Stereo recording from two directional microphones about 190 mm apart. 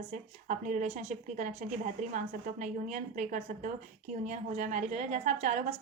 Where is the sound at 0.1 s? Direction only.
40° right (ahead or behind).